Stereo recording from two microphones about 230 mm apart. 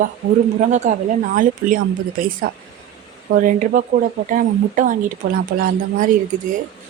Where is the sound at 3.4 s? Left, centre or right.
Right.